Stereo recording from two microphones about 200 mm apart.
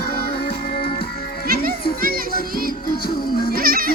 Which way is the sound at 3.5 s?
45° right (ahead or behind).